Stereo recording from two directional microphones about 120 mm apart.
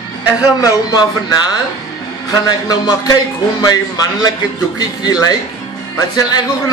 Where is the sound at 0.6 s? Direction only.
30° left (ahead or behind).